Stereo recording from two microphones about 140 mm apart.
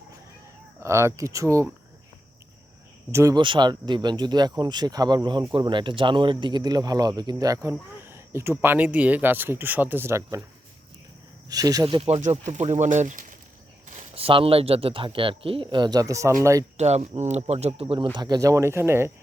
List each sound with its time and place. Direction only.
0.8 s speech: 20° right (ahead or behind)
3.1 s speech: 20° right (ahead or behind)
3.3 s speech: 35° right (ahead or behind)
11.4 s speech: 25° right (ahead or behind)
12.0 s speech: 50° right (ahead or behind)
13.8 s a sound: 60° right (ahead or behind)
14.2 s speech: 40° right (ahead or behind); by 16.6 s 20° right (ahead or behind)
16.7 s speech: 50° right (ahead or behind); by 19.1 s 20° right (ahead or behind)